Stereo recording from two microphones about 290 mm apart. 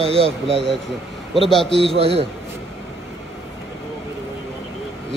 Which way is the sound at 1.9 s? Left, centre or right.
Centre.